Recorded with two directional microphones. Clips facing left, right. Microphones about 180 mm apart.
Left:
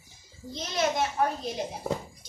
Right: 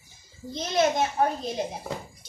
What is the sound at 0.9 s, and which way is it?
Speech, 25° right (ahead or behind).